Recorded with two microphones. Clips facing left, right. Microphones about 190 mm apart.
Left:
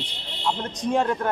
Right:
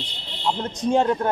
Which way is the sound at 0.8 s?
25° right (ahead or behind).